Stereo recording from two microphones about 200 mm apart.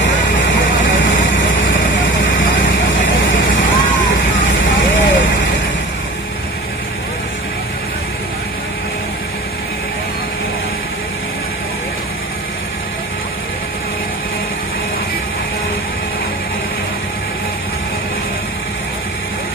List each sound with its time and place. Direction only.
0.0 s vehicle: 70° left (ahead or behind)